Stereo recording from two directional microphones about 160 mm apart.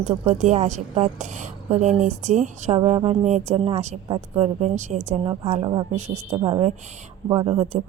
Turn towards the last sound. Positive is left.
turn(degrees=-35)  # may be behind; listen again after turning